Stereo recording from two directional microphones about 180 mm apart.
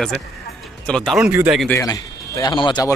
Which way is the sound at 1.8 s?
20° left (ahead or behind).